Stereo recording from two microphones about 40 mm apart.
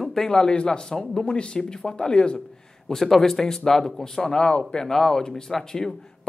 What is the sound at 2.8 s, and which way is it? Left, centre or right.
A man's voice, centre.